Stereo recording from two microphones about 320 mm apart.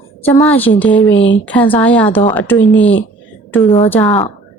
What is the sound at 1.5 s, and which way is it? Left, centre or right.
Speech, centre.